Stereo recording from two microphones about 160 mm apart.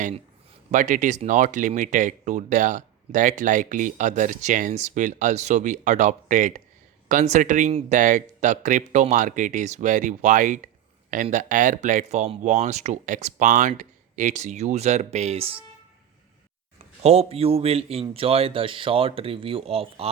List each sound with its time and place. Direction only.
0.7 s speech: 50° right (ahead or behind)
16.7 s a man's voice: 40° right (ahead or behind)